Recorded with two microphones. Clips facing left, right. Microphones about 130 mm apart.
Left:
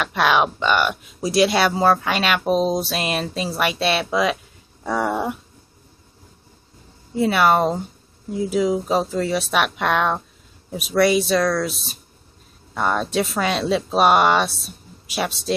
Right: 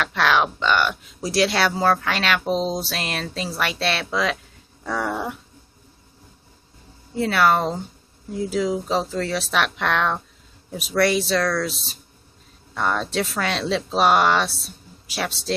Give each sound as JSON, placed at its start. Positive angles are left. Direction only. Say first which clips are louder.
{"t": 0.0, "sound": "speech", "louder": "left 2 dB", "side_deg": 10}
{"t": 7.2, "sound": "speech", "louder": "left 2 dB", "side_deg": 10}